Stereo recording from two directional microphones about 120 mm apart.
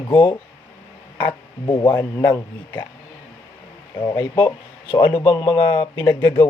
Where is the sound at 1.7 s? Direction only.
20° left (ahead or behind).